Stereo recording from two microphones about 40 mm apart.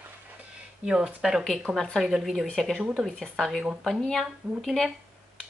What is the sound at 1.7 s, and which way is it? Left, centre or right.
Speech, centre.